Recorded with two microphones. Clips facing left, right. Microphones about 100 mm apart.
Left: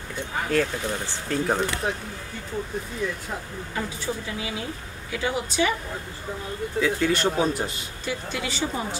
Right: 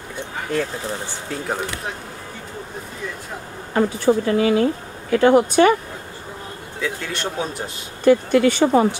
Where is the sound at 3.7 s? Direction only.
55° right (ahead or behind).